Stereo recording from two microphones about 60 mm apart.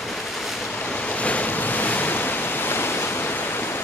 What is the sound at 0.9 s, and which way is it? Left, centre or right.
Waves, left.